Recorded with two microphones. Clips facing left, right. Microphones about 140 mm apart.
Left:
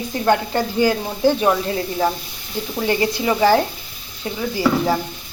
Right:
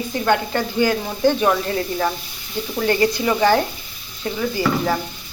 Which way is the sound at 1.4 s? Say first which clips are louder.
Left 1 dB; 20° left (ahead or behind).